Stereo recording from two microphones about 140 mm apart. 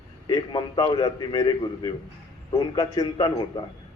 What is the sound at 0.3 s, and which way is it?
A man's voice, 30° left (ahead or behind).